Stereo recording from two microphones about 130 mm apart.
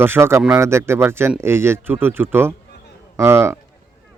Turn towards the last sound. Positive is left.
turn(degrees=-20)  # may be behind; listen again after turning